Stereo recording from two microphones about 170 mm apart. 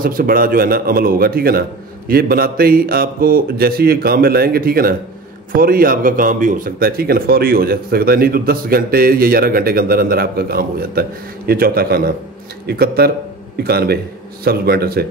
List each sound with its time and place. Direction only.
0.0 s a man's voice: 60° right (ahead or behind)